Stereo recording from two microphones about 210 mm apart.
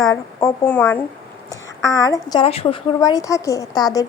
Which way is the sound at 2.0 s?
20° left (ahead or behind).